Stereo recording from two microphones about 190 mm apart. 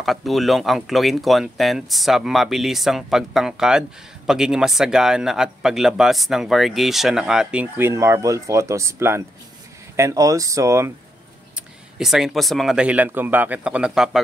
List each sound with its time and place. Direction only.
0.0 s a man's voice: centre (ahead or behind); by 10.9 s 15° right (ahead or behind)
11.5 s a man's voice: centre (ahead or behind)